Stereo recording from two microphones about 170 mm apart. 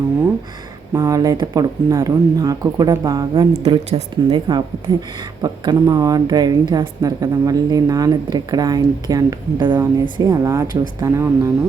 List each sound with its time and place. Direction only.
0.9 s speech: 20° right (ahead or behind)
3.5 s speech: 35° right (ahead or behind)
4.3 s speech: 25° right (ahead or behind)